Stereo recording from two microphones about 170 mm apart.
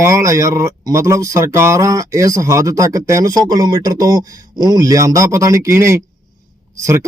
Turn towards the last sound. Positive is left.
turn(degrees=-15)  # may be behind; listen again after turning